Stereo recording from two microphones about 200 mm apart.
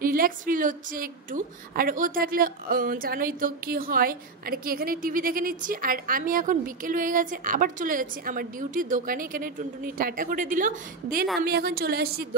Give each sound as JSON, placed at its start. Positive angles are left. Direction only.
{"t": 0.0, "sound": "a woman's voice", "side_deg": -45}